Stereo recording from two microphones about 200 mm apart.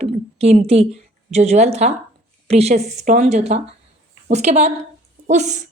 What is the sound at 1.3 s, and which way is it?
A woman's voice, 35° right (ahead or behind).